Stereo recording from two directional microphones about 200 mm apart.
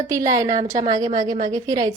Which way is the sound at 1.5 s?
15° right (ahead or behind).